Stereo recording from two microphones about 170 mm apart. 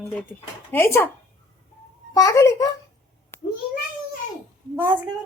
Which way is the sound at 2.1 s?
20° left (ahead or behind).